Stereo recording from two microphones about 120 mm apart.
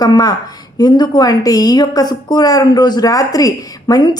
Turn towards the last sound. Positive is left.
turn(degrees=35)  # may be behind; listen again after turning